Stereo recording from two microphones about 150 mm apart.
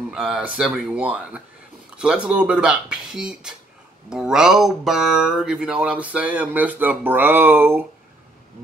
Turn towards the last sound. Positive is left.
turn(degrees=-15)  # may be behind; listen again after turning